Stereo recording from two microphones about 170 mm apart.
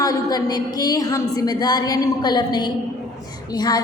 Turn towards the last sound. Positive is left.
turn(degrees=25)  # may be behind; listen again after turning